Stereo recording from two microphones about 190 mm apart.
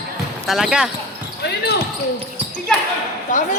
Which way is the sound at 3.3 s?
40° left (ahead or behind).